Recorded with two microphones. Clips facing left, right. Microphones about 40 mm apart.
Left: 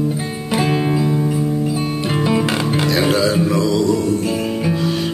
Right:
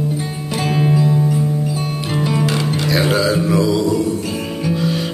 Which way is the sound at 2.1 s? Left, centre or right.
Centre.